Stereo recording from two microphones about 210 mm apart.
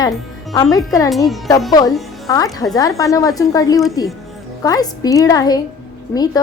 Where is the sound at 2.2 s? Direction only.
15° left (ahead or behind).